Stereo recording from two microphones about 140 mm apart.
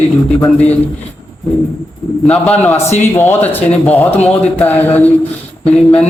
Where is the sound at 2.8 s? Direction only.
55° left (ahead or behind).